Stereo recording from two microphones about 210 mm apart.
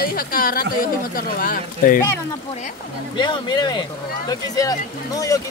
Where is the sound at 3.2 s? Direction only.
20° left (ahead or behind).